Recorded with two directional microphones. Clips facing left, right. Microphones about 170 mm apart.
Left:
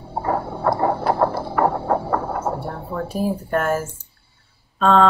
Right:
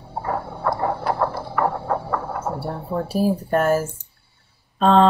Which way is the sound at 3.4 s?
35° right (ahead or behind).